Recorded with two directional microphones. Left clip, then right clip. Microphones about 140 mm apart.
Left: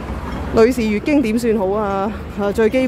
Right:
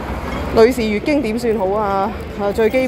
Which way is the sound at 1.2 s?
40° left (ahead or behind).